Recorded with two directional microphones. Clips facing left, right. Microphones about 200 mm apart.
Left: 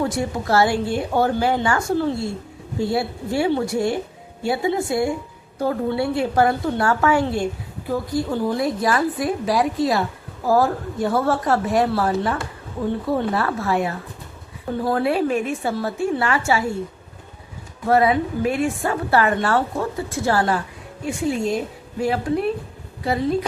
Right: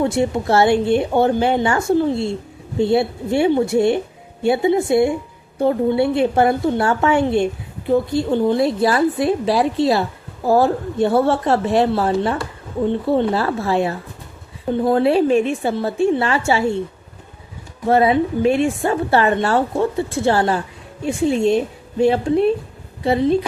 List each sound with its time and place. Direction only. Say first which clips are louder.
0.0 s a woman's voice: right 5 dB; 25° right (ahead or behind)
17.8 s a woman's voice: right 3 dB; 25° right (ahead or behind)